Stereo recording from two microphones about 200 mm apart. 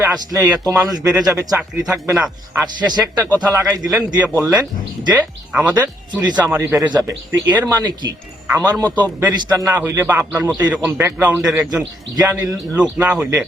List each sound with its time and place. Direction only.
0.1 s a man's voice: 20° right (ahead or behind)
0.7 s speech: 5° right (ahead or behind)
0.9 s a man's voice: 20° right (ahead or behind)
2.7 s a man's voice: 20° right (ahead or behind)
6.1 s speech: 20° right (ahead or behind)
6.4 s a man's voice: 10° right (ahead or behind)